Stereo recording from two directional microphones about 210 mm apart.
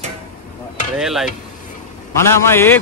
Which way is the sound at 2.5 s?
10° left (ahead or behind).